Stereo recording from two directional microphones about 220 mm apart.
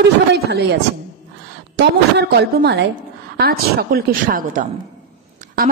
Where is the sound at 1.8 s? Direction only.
50° right (ahead or behind).